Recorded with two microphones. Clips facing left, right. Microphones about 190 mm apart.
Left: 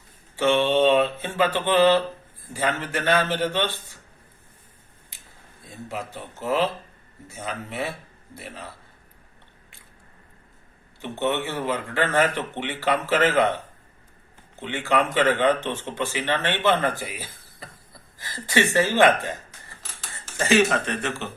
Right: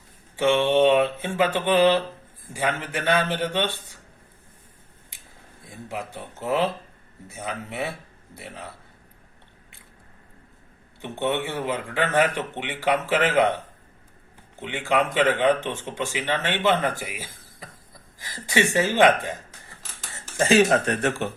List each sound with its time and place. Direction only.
0.3 s speech: 15° right (ahead or behind)
5.6 s speech: 15° right (ahead or behind)
11.0 s speech: 15° right (ahead or behind)
14.6 s speech: 10° right (ahead or behind)
20.7 s speech: 40° right (ahead or behind)